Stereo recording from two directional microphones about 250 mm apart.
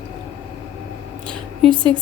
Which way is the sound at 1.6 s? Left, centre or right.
Centre.